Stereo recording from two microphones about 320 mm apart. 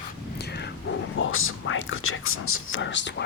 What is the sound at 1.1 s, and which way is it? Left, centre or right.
Speech, left.